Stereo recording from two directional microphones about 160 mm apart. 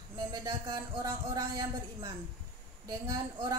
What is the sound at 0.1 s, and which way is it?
A man's voice, 25° right (ahead or behind).